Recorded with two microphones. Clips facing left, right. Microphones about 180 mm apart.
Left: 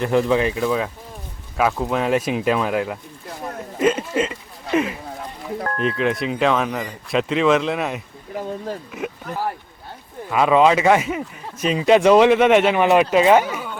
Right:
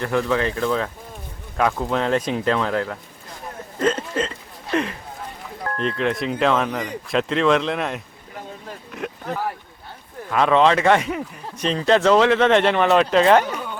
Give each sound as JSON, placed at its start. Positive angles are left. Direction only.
{"t": 0.0, "sound": "speech", "side_deg": 20}
{"t": 10.2, "sound": "speech", "side_deg": 5}